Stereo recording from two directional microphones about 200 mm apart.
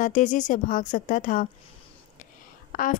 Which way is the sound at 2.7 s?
40° left (ahead or behind).